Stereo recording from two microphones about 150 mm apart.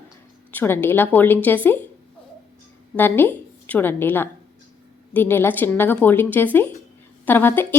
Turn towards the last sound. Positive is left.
turn(degrees=15)  # may be behind; listen again after turning